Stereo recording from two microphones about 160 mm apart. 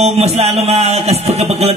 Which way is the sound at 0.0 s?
40° right (ahead or behind).